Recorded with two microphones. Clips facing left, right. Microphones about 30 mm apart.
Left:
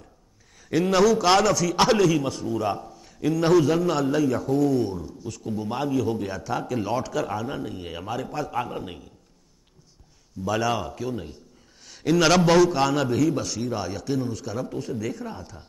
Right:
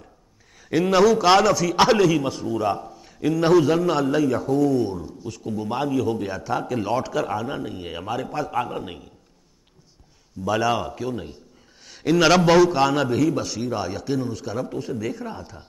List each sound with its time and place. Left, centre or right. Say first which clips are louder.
0.7 s a man's voice: right 2 dB; centre
5.9 s a man's voice: right 1 dB; right
6.2 s a man's voice: right 3 dB; centre
10.4 s a man's voice: right 3 dB; centre